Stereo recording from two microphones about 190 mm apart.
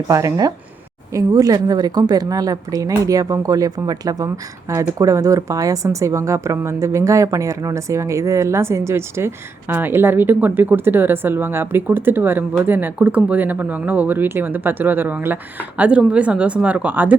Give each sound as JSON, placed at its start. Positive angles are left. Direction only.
{"t": 0.1, "sound": "a woman's voice", "side_deg": -15}